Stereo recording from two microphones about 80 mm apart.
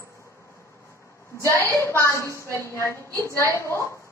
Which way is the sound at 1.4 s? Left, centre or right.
Left.